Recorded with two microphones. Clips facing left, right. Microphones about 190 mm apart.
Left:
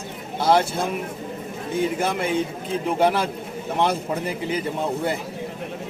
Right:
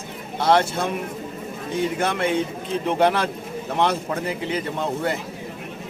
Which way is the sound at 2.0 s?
5° left (ahead or behind).